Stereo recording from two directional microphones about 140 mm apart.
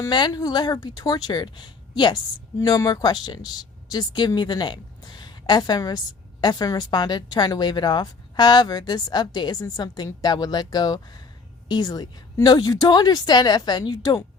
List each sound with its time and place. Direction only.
0.0 s a woman's voice: 30° left (ahead or behind)